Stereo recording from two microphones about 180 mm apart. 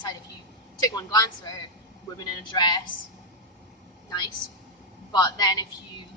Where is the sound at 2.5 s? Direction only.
25° left (ahead or behind).